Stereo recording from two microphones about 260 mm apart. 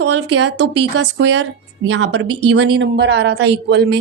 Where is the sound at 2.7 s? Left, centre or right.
Right.